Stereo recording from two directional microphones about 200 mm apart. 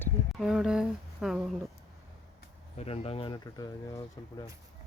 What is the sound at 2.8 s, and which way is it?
Speech, 30° left (ahead or behind).